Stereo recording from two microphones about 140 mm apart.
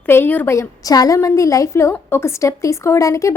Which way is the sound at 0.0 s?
15° left (ahead or behind).